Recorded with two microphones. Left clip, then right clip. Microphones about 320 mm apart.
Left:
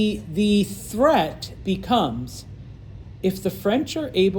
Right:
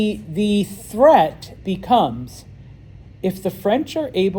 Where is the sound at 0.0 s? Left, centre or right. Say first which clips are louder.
Right 2 dB; right.